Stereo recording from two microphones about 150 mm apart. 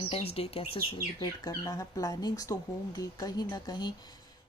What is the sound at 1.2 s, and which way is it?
Speech, 25° left (ahead or behind).